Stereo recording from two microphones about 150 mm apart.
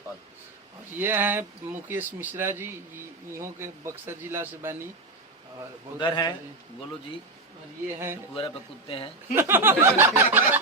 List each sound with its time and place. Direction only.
0.9 s speech: 15° right (ahead or behind)
6.0 s a man's voice: 30° left (ahead or behind)
7.9 s speech: 15° right (ahead or behind)
8.4 s speech: 35° left (ahead or behind)
9.3 s speech: 15° right (ahead or behind)